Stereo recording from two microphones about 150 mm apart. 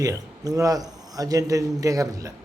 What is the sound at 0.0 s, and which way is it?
Speech, 25° right (ahead or behind).